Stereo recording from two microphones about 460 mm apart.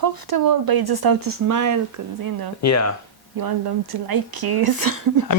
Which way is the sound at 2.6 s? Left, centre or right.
Left.